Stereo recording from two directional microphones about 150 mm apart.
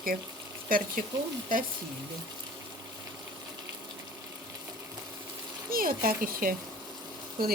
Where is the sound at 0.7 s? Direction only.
70° right (ahead or behind).